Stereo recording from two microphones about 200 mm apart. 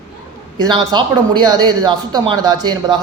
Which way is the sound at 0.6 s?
20° right (ahead or behind).